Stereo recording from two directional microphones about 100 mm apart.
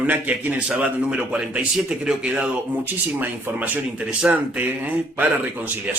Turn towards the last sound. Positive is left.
turn(degrees=-15)  # may be behind; listen again after turning